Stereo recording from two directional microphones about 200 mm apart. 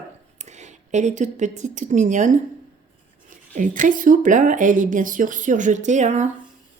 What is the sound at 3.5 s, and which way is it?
Speech, 40° right (ahead or behind).